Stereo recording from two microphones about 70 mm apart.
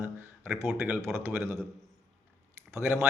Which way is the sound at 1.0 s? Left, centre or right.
Right.